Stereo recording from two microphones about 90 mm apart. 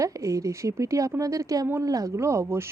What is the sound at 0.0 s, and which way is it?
Speech, 35° right (ahead or behind).